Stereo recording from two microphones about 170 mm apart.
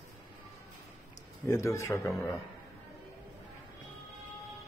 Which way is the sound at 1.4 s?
20° left (ahead or behind).